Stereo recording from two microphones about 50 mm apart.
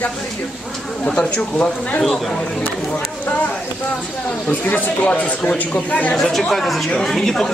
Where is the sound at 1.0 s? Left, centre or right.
Centre.